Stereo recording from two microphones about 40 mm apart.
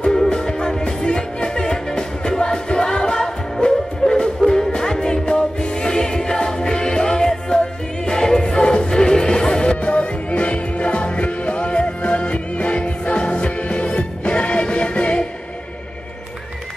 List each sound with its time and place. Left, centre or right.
0.0 s music: centre
9.8 s music: left